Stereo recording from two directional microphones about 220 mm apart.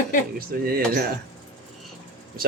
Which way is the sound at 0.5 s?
40° right (ahead or behind).